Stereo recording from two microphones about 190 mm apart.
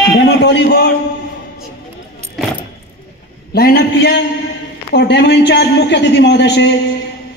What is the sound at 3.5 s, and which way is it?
A man's voice, 60° left (ahead or behind).